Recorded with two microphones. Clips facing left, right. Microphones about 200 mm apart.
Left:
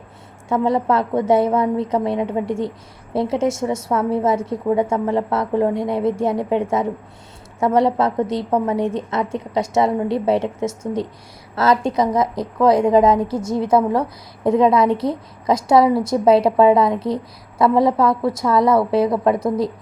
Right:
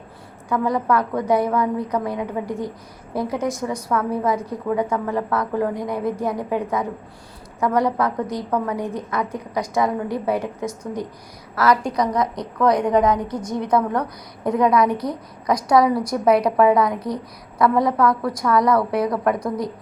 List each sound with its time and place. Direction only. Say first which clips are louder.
0.4 s a woman's voice: left 3 dB; 25° left (ahead or behind)